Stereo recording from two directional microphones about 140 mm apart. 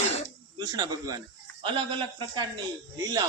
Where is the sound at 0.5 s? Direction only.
30° right (ahead or behind).